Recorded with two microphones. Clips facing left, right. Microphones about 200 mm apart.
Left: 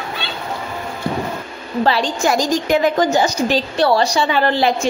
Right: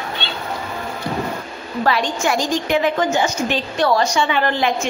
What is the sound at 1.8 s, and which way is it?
A woman's voice, 30° left (ahead or behind).